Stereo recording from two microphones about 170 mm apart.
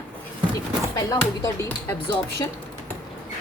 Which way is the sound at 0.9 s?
20° left (ahead or behind).